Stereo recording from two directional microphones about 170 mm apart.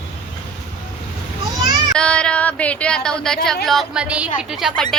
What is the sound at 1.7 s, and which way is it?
Child singing, 25° right (ahead or behind).